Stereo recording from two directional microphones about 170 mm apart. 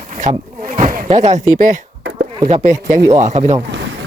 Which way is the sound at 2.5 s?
40° right (ahead or behind).